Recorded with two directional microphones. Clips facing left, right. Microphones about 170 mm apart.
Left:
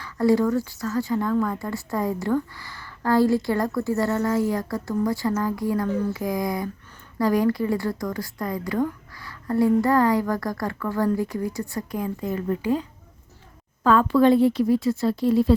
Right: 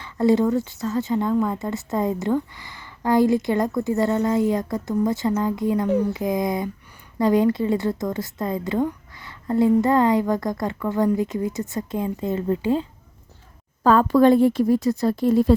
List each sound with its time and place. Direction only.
0.0 s speech: 20° right (ahead or behind)
13.8 s a woman's voice: 40° right (ahead or behind)